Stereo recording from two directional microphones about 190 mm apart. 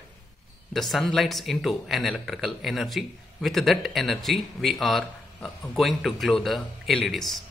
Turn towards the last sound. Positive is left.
turn(degrees=0)  # may be behind; listen again after turning